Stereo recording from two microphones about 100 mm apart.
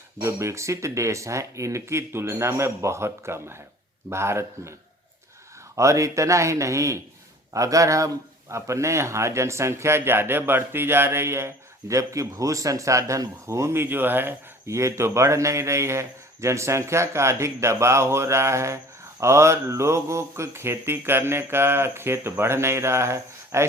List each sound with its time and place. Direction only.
0.2 s speech: 30° right (ahead or behind)
5.7 s speech: 30° right (ahead or behind)